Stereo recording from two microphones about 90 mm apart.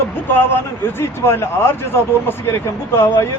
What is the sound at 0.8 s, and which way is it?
Speech, 25° left (ahead or behind).